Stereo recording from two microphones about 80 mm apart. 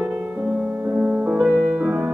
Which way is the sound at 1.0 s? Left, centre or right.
Centre.